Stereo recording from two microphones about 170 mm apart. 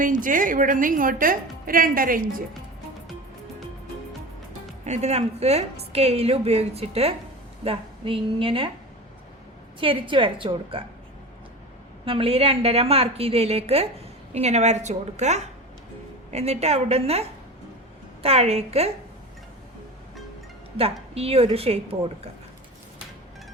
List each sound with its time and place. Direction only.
0.0 s a woman's voice: 50° right (ahead or behind)
4.9 s a woman's voice: 40° right (ahead or behind)
9.8 s a woman's voice: 30° right (ahead or behind)
12.0 s a woman's voice: 30° right (ahead or behind)
20.7 s a woman's voice: 35° right (ahead or behind)